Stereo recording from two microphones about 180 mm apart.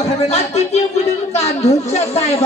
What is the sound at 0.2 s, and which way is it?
A woman's voice, 35° left (ahead or behind).